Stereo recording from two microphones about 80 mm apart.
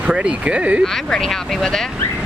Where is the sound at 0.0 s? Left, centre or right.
Centre.